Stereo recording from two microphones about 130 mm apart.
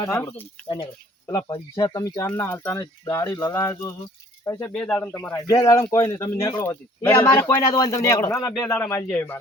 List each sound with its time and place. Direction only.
0.0 s speech: 15° left (ahead or behind)
1.3 s speech: 35° left (ahead or behind)
4.7 s speech: 5° left (ahead or behind)
5.3 s speech: 30° left (ahead or behind)